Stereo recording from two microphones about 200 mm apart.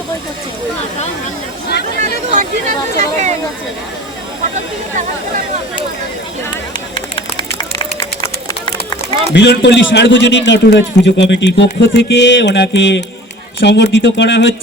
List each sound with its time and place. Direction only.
2.0 s a sound: 35° right (ahead or behind)
2.9 s speech: 35° right (ahead or behind)
7.2 s run: 25° left (ahead or behind)
9.3 s a man's voice: 60° left (ahead or behind)